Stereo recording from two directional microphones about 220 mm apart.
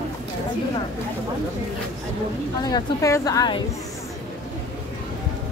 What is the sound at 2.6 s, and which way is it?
A woman's voice, 15° left (ahead or behind).